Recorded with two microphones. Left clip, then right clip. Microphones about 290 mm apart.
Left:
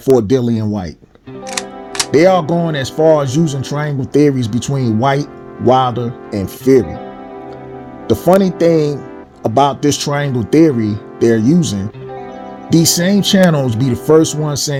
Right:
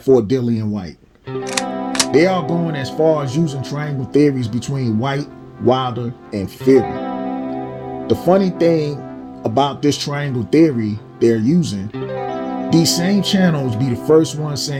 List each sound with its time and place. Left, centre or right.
0.0 s speech: left
1.5 s music: centre
2.1 s speech: left
8.0 s speech: left